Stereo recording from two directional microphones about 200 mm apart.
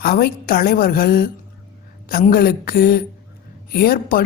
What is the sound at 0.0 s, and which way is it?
A woman's voice, 50° left (ahead or behind).